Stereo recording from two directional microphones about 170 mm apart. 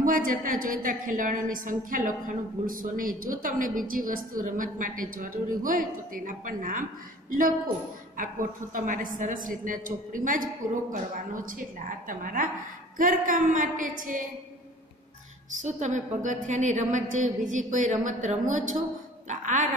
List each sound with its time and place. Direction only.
0.0 s a woman's voice: 55° right (ahead or behind)
15.6 s a woman's voice: 45° right (ahead or behind)